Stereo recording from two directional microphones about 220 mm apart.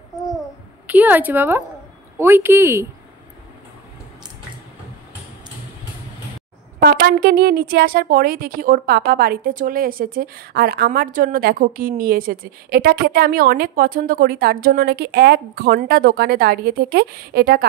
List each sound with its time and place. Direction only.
0.8 s a woman's voice: 10° right (ahead or behind)
6.8 s a woman's voice: 45° right (ahead or behind)